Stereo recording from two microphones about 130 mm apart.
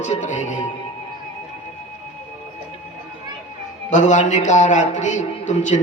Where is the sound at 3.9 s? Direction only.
70° left (ahead or behind).